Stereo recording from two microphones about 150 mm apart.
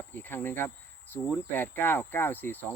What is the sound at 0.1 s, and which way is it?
Speech, 15° left (ahead or behind).